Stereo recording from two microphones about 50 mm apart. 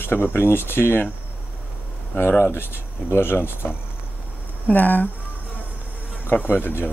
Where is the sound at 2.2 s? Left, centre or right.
Left.